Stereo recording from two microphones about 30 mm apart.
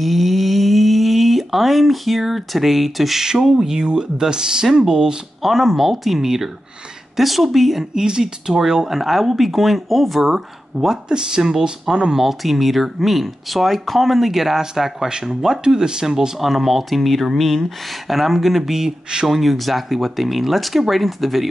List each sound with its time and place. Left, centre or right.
0.0 s speech: centre
3.2 s speech: centre
5.4 s speech: centre
7.9 s speech: right; by 10.3 s centre
10.3 s speech: centre
11.1 s speech: right
12.2 s speech: centre
15.6 s speech: right
16.3 s speech: centre